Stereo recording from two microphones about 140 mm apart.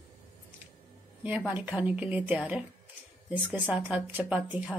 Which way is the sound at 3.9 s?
10° right (ahead or behind).